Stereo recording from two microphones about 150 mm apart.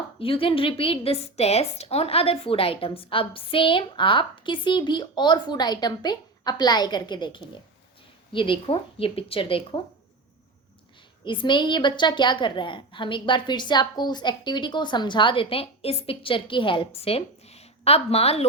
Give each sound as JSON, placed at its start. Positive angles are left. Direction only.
{"t": 0.2, "sound": "a woman's voice", "side_deg": 35}
{"t": 11.3, "sound": "a woman's voice", "side_deg": 35}